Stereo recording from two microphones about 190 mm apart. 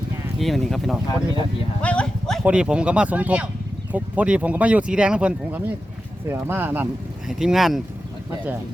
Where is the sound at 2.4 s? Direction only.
5° right (ahead or behind).